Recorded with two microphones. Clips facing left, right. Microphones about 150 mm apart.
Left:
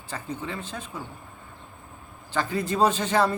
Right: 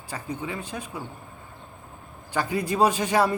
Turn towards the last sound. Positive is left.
turn(degrees=-10)  # may be behind; listen again after turning